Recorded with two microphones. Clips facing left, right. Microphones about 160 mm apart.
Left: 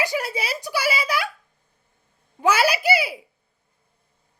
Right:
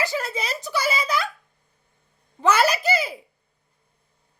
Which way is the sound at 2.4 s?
10° left (ahead or behind).